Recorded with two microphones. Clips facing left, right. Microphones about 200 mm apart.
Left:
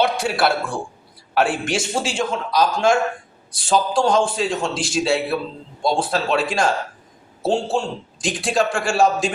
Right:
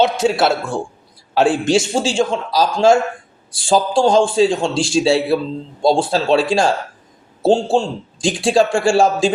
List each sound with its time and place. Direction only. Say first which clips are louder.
0.0 s a man's voice: right 4 dB; 20° right (ahead or behind)